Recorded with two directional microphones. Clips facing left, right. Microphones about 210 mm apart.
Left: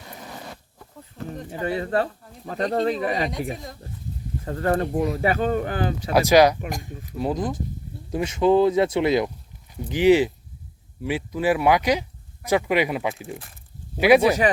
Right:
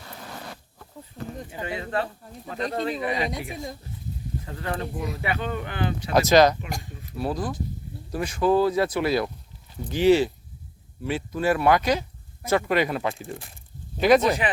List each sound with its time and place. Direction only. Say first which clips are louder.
0.3 s a sound: left 1 dB; centre (ahead or behind)
1.5 s speech: left 9 dB; 40° left (ahead or behind)
6.1 s speech: left 1 dB; 10° left (ahead or behind)